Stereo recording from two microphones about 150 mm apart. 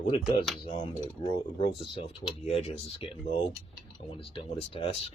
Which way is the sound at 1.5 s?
35° left (ahead or behind).